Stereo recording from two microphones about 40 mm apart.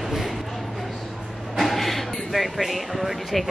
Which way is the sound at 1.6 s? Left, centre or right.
Centre.